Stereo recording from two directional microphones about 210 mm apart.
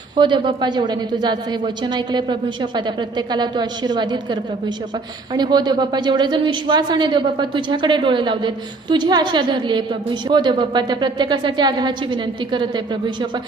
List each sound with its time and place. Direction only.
0.2 s a woman's voice: 25° right (ahead or behind)